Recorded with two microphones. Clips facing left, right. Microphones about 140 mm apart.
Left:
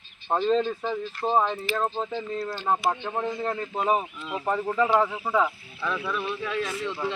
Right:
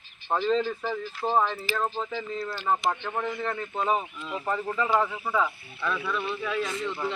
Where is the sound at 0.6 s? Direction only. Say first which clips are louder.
Left 2 dB; 25° left (ahead or behind).